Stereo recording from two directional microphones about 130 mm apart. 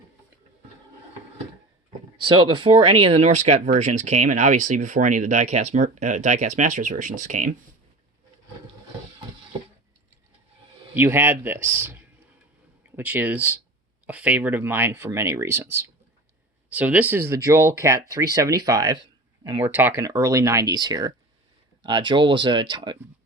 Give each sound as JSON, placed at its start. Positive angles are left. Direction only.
{"t": 2.1, "sound": "speech", "side_deg": -40}
{"t": 10.9, "sound": "speech", "side_deg": -15}
{"t": 19.6, "sound": "speech", "side_deg": -15}
{"t": 19.9, "sound": "speech", "side_deg": -25}